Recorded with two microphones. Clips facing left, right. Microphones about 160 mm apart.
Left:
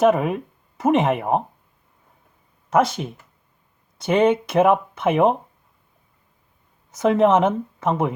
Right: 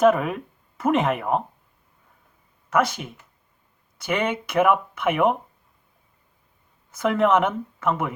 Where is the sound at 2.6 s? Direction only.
25° left (ahead or behind).